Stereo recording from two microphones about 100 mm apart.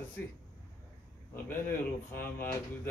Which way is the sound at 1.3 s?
20° left (ahead or behind).